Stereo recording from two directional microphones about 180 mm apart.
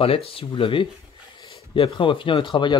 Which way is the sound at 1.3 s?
30° left (ahead or behind).